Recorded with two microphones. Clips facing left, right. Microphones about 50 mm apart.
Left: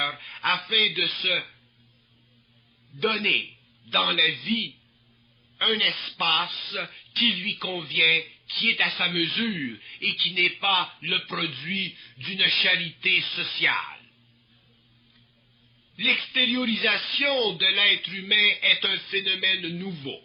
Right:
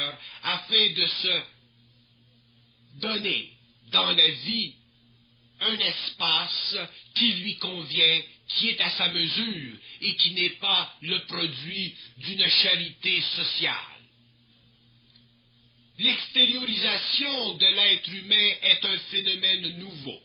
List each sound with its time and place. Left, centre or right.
0.3 s speech: left
3.0 s speech: left
16.0 s speech: left